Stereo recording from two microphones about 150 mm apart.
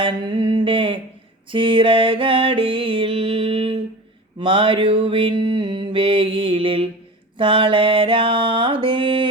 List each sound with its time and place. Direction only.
0.0 s a sound: 30° right (ahead or behind)
1.5 s mantra: 35° right (ahead or behind)
7.3 s music: 35° right (ahead or behind)